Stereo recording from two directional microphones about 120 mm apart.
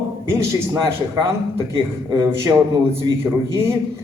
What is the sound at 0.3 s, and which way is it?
Speech, 20° right (ahead or behind).